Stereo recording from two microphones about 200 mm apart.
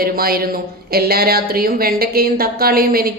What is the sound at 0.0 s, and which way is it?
Speech, 50° right (ahead or behind).